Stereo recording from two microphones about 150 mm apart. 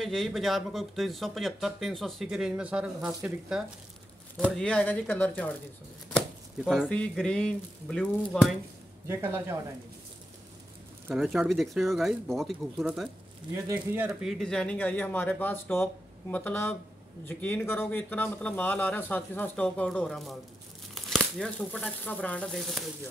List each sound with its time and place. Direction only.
0.0 s speech: centre (ahead or behind)
6.1 s speech: centre (ahead or behind)
9.0 s speech: 15° right (ahead or behind)
11.1 s speech: centre (ahead or behind)
13.7 s speech: 15° right (ahead or behind)
14.4 s speech: 5° left (ahead or behind)